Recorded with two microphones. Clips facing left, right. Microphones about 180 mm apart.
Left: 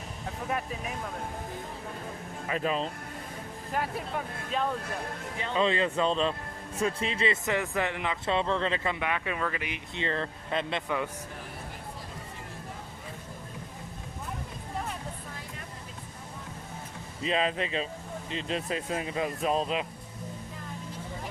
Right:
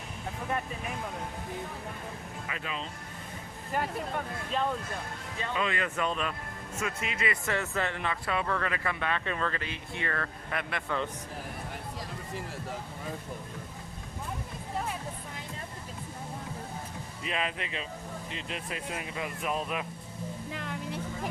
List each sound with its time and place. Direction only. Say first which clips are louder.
2.5 s speech: left 10 dB; 40° left (ahead or behind)
4.5 s speech: even; centre (ahead or behind)
5.4 s speech: left 5 dB; 25° left (ahead or behind)
7.4 s speech: left 2 dB; 15° left (ahead or behind)
17.2 s speech: left 6 dB; 30° left (ahead or behind)
20.5 s a sound: right 4 dB; 80° right